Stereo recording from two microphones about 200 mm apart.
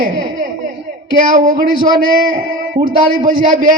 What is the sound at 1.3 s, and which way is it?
A man's voice, 45° right (ahead or behind).